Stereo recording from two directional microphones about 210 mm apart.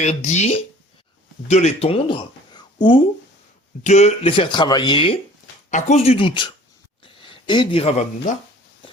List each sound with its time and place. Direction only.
0.0 s speech: 35° left (ahead or behind)